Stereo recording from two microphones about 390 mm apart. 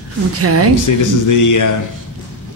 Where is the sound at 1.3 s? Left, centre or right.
Left.